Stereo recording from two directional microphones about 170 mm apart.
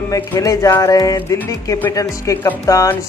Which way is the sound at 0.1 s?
20° left (ahead or behind).